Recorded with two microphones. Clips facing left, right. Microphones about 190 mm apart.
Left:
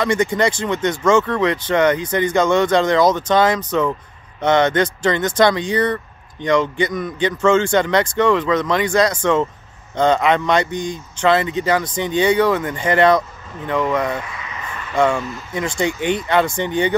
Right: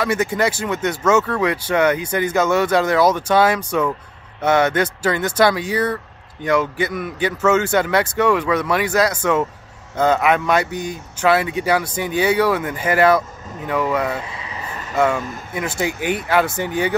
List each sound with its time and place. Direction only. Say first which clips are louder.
0.0 s speech: left 2 dB; 5° right (ahead or behind)
14.2 s vehicle: even; 30° right (ahead or behind)
15.0 s speech: left 1 dB; 5° right (ahead or behind)